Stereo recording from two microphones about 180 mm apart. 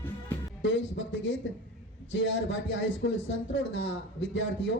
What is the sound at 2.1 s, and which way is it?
A man's voice, 90° left.